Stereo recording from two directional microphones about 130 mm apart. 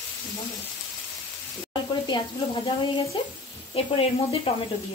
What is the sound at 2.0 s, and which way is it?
Speech, 35° left (ahead or behind).